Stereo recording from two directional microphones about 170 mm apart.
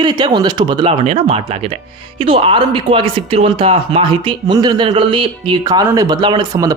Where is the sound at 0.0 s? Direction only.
25° right (ahead or behind).